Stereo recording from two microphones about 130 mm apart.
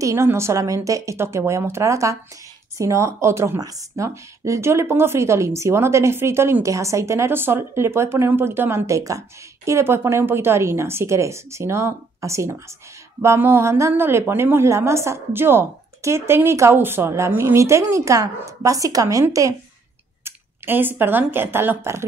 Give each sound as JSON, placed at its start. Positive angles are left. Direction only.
{"t": 0.0, "sound": "speech", "side_deg": -20}